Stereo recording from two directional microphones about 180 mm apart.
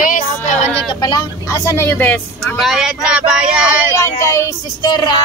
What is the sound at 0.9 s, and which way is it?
Speech, 20° left (ahead or behind).